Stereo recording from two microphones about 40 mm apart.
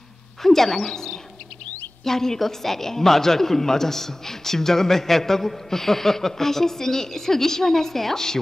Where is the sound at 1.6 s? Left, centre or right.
Left.